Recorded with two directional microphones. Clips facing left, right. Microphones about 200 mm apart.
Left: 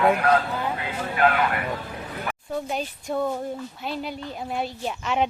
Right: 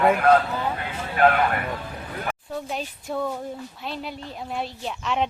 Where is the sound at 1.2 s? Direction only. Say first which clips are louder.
Right 3 dB; 45° right (ahead or behind).